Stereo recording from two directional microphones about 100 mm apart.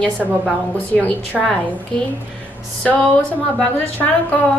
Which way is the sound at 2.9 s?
10° left (ahead or behind).